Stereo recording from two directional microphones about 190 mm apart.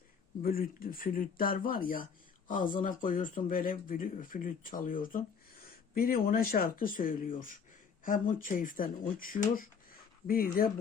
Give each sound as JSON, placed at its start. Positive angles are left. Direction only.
{"t": 0.4, "sound": "speech", "side_deg": 50}